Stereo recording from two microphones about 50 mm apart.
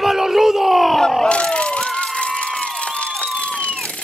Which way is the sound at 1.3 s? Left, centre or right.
Left.